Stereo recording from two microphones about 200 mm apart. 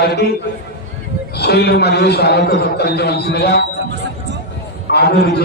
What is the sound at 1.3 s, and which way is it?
A man's voice, 55° left (ahead or behind).